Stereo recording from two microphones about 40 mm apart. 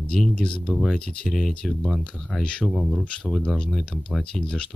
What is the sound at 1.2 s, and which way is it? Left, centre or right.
Speech, centre.